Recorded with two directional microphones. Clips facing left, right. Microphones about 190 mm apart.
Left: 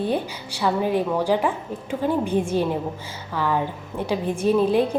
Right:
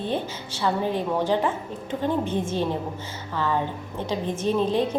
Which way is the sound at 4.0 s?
10° left (ahead or behind).